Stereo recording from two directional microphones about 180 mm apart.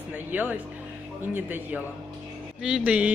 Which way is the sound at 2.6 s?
5° right (ahead or behind).